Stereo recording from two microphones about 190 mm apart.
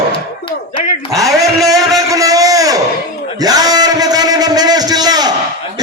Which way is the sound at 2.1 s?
20° right (ahead or behind).